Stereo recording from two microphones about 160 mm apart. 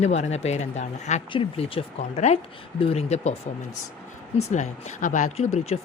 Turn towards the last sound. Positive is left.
turn(degrees=45)  # may be behind; listen again after turning